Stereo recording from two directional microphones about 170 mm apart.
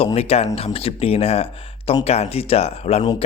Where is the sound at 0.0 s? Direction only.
35° left (ahead or behind).